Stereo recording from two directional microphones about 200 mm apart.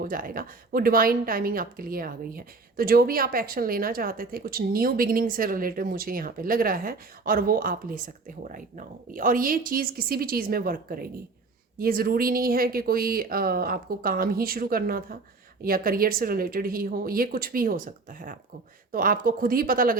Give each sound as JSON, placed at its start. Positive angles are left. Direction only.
{"t": 0.0, "sound": "speech", "side_deg": -45}